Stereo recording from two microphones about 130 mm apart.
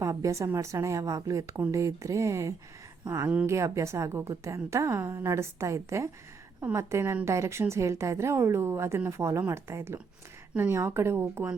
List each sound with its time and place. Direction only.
0.0 s a woman's voice: 25° right (ahead or behind)